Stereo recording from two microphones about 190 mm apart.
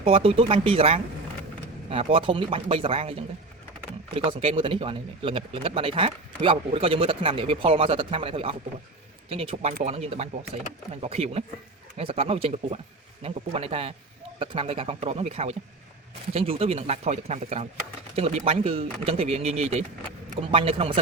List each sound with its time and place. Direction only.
0.0 s speech: 30° right (ahead or behind)